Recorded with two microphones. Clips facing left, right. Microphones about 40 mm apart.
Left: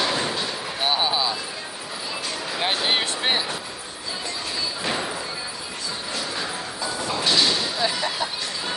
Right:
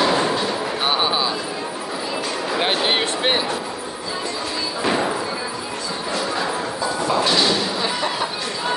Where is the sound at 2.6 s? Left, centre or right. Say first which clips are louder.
Right 3 dB; right.